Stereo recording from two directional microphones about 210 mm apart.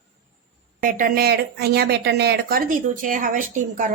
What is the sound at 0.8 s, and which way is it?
Speech, 45° right (ahead or behind).